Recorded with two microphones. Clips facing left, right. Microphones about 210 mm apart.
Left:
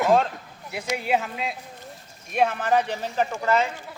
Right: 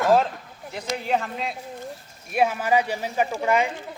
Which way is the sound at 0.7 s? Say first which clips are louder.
Left 1 dB; 10° left (ahead or behind).